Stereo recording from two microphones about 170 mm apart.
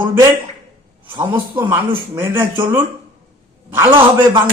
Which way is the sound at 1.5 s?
15° right (ahead or behind).